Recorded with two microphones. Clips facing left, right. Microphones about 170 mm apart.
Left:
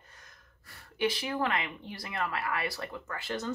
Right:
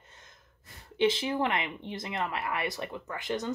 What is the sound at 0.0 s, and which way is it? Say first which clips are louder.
Speech: right 1 dB; 25° right (ahead or behind).